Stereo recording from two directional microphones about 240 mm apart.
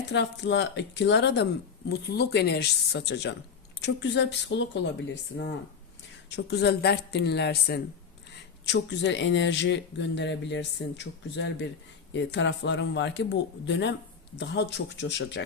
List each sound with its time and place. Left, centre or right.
0.1 s speech: left